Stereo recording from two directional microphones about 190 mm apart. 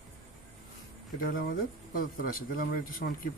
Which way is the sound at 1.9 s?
50° left (ahead or behind).